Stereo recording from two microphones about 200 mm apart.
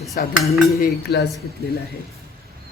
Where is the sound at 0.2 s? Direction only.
45° left (ahead or behind).